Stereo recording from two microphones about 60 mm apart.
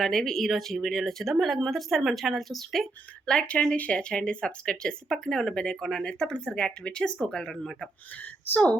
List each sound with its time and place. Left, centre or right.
0.0 s speech: centre
8.2 s a woman's voice: left